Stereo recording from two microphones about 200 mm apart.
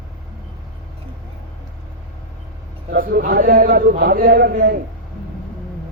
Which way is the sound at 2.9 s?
45° right (ahead or behind).